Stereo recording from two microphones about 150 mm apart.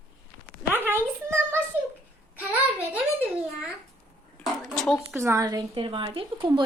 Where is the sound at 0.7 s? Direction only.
15° right (ahead or behind).